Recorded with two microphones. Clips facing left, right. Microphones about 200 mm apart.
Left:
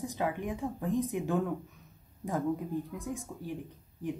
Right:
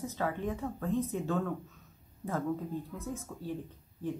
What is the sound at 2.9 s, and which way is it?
Speech, 15° left (ahead or behind).